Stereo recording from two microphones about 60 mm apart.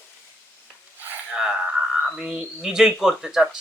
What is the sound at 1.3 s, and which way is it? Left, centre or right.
Speech, centre.